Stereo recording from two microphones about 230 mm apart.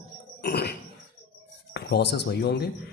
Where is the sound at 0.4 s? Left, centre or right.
Left.